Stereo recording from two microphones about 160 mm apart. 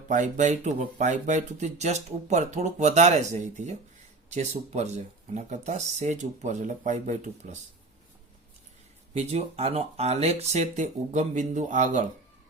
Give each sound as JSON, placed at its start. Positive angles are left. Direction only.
{"t": 0.1, "sound": "speech", "side_deg": -50}
{"t": 9.1, "sound": "speech", "side_deg": -40}